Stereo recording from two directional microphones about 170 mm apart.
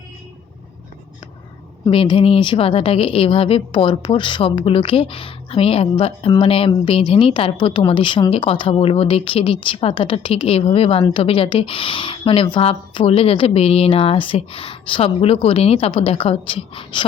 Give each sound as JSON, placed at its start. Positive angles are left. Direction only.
{"t": 1.9, "sound": "a woman's voice", "side_deg": 30}